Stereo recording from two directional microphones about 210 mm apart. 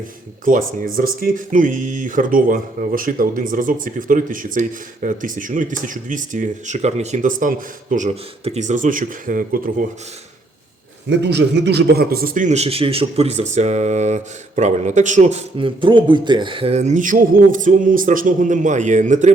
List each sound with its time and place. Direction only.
0.4 s a man's voice: 40° right (ahead or behind)
11.1 s a man's voice: 55° right (ahead or behind); by 19.3 s 35° right (ahead or behind)